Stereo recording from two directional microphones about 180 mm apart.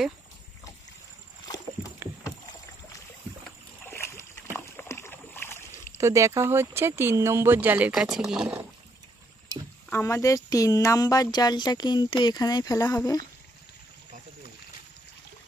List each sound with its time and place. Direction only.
1.4 s rowboat: 20° left (ahead or behind)
3.8 s splash: 15° left (ahead or behind)
5.9 s speech: 15° right (ahead or behind)
9.8 s speech: 15° left (ahead or behind)